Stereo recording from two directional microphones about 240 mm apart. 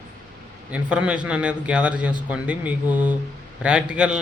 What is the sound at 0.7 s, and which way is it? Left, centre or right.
A man's voice, centre.